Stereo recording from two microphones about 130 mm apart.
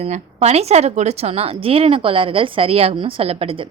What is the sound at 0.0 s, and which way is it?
Speech, 55° right (ahead or behind).